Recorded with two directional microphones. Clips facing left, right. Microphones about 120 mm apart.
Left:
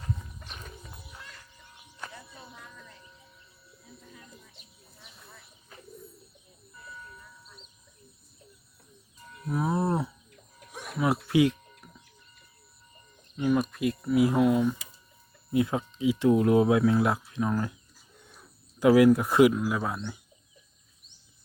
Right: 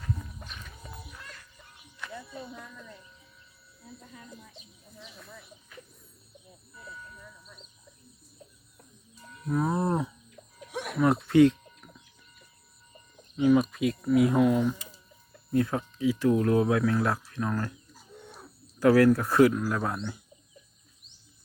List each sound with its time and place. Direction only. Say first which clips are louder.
0.4 s horse: left 1 dB; 40° left (ahead or behind)
9.5 s a sound: even; 5° left (ahead or behind)
10.7 s a sound: right 7 dB; 75° right (ahead or behind)
11.0 s speech: right 4 dB; 5° left (ahead or behind)
13.3 s speech: right 4 dB; centre (ahead or behind)
18.8 s speech: left 1 dB; 15° left (ahead or behind)
19.6 s speech: even; 5° left (ahead or behind)